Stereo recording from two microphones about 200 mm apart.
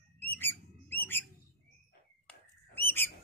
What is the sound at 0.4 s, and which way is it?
Bird, 10° left (ahead or behind).